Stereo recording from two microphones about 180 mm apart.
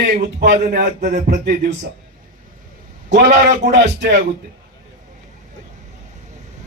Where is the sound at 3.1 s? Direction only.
75° right (ahead or behind).